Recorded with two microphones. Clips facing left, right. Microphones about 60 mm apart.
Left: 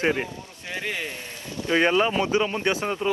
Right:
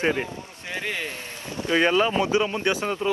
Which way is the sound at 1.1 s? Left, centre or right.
Right.